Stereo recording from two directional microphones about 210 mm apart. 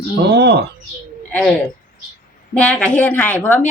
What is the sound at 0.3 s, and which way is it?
Speech, 55° right (ahead or behind).